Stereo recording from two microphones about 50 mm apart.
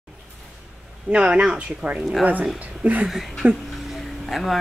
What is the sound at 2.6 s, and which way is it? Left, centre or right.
Speech, right.